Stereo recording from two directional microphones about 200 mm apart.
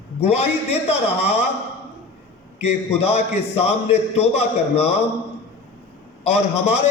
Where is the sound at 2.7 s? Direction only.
30° left (ahead or behind).